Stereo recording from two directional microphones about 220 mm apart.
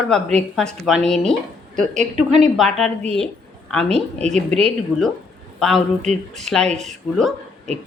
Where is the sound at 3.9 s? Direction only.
30° right (ahead or behind).